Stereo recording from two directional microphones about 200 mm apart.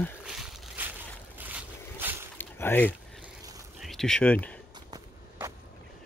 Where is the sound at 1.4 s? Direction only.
10° right (ahead or behind).